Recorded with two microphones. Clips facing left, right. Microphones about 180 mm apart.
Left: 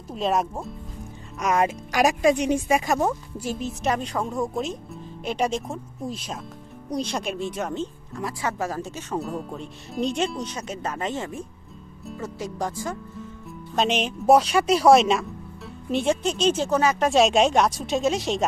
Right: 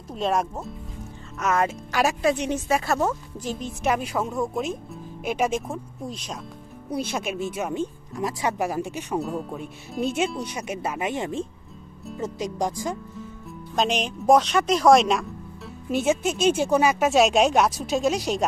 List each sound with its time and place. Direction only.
0.1 s speech: centre (ahead or behind)
1.4 s speech: 15° left (ahead or behind); by 9.2 s 15° right (ahead or behind)
9.2 s speech: centre (ahead or behind)
13.7 s speech: centre (ahead or behind)